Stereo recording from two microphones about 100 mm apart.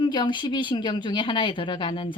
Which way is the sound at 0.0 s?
50° left (ahead or behind).